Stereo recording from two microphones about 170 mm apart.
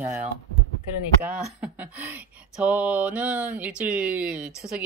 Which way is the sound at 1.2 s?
10° right (ahead or behind).